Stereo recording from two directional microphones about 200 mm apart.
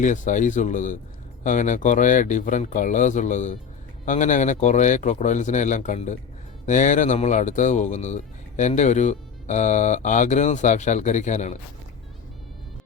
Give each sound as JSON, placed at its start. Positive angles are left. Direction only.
{"t": 0.0, "sound": "speech", "side_deg": 40}